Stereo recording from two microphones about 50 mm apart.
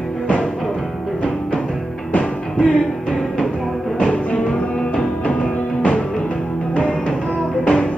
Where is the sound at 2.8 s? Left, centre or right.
Centre.